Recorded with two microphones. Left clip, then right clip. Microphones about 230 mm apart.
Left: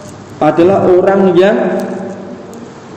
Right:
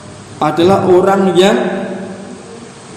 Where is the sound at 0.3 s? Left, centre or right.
Right.